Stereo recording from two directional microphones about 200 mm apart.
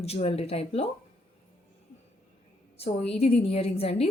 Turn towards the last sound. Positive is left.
turn(degrees=30)  # may be behind; listen again after turning